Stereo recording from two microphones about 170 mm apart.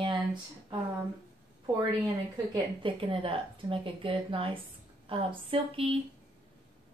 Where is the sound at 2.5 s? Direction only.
30° right (ahead or behind).